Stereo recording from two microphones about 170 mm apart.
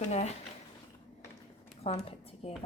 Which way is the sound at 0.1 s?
40° left (ahead or behind).